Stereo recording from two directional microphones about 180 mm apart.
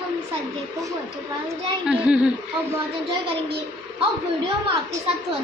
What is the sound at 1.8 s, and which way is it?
Speech, 5° right (ahead or behind).